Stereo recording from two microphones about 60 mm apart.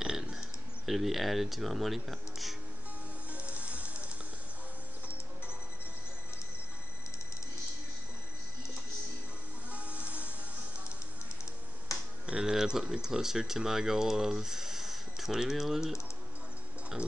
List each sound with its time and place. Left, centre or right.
0.0 s a sound: centre
0.8 s speech: centre
3.3 s music: right
9.7 s music: right
11.9 s finger snapping: left
12.3 s speech: centre